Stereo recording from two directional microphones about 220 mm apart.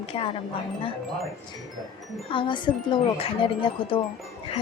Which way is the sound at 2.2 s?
20° left (ahead or behind).